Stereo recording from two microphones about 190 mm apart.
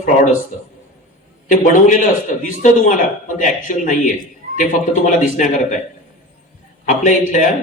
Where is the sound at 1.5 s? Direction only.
40° left (ahead or behind).